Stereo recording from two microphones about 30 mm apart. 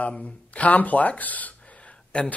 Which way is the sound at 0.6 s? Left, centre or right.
Left.